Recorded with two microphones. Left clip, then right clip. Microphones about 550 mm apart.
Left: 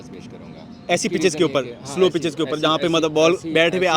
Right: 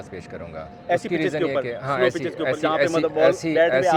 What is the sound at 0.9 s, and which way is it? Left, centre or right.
A man's voice, left.